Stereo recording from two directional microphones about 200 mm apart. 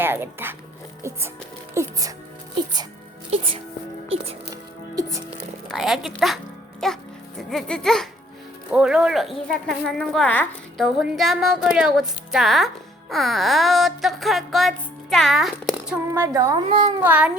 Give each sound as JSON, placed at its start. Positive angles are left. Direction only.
{"t": 0.0, "sound": "speech", "side_deg": -10}
{"t": 1.7, "sound": "speech", "side_deg": -15}
{"t": 3.3, "sound": "speech", "side_deg": -25}
{"t": 5.6, "sound": "a child's voice", "side_deg": 0}
{"t": 16.1, "sound": "speech", "side_deg": -15}
{"t": 16.6, "sound": "speech", "side_deg": -25}
{"t": 17.0, "sound": "speech", "side_deg": -5}